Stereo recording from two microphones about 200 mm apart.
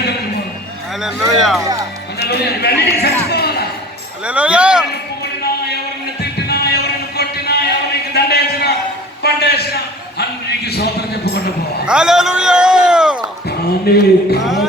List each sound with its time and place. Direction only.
1.0 s speech: centre (ahead or behind)
2.1 s speech: 55° left (ahead or behind)
4.3 s speech: 5° right (ahead or behind)
5.2 s a sound: 55° left (ahead or behind)
6.5 s music: 55° left (ahead or behind)
8.1 s a sound: 55° left (ahead or behind)
11.9 s a sound: 5° right (ahead or behind)
13.8 s speech: 50° left (ahead or behind)
14.4 s speech: centre (ahead or behind)